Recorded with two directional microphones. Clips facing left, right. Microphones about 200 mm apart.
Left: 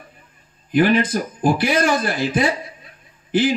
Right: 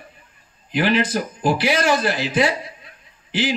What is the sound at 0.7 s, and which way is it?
A man's voice, 50° left (ahead or behind).